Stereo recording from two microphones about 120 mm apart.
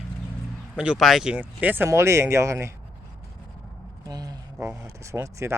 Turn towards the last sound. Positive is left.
turn(degrees=-25)  # may be behind; listen again after turning